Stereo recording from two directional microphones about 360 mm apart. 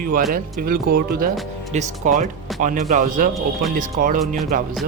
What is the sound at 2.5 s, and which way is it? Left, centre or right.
Speech, centre.